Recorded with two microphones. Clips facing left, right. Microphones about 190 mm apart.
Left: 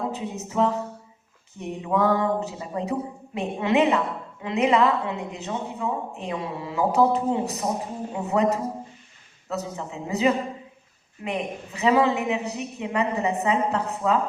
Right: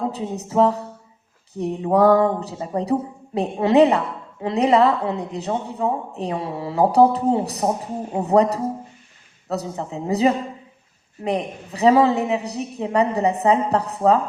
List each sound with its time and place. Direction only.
0.1 s a woman's voice: 35° right (ahead or behind)